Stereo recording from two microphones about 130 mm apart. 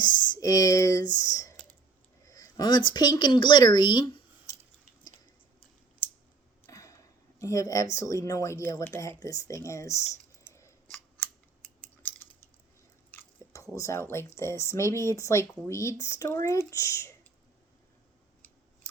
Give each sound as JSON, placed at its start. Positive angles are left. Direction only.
{"t": 0.3, "sound": "speech", "side_deg": 25}
{"t": 6.7, "sound": "a sound", "side_deg": 25}
{"t": 7.3, "sound": "speech", "side_deg": 25}
{"t": 10.5, "sound": "scissors", "side_deg": 20}
{"t": 12.0, "sound": "a sound", "side_deg": 15}
{"t": 13.1, "sound": "speech", "side_deg": 20}